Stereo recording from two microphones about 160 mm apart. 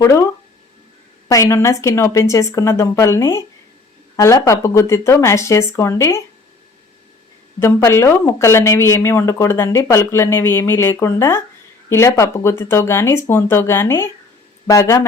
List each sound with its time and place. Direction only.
0.0 s a woman's voice: 20° left (ahead or behind)
1.3 s a woman's voice: 20° left (ahead or behind)
7.6 s a woman's voice: 15° left (ahead or behind)